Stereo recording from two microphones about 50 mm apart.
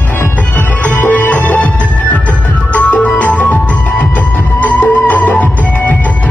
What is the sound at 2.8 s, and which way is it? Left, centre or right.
Music, left.